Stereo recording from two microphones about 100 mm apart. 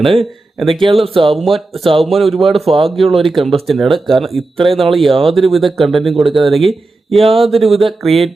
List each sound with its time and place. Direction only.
0.7 s speech: 60° right (ahead or behind)
1.4 s speech: centre (ahead or behind)
2.5 s speech: 80° right
2.9 s speech: centre (ahead or behind)
7.2 s speech: 70° right (ahead or behind)
7.5 s speech: centre (ahead or behind)